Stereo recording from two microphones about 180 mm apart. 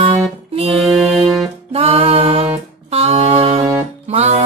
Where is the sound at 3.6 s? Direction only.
15° right (ahead or behind).